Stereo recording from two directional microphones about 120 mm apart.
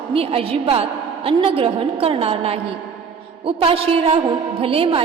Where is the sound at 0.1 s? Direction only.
50° right (ahead or behind).